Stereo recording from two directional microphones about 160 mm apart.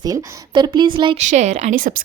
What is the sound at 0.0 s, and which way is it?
Speech, 25° right (ahead or behind).